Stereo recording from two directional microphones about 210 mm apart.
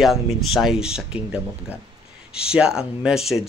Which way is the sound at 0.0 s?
Centre (ahead or behind).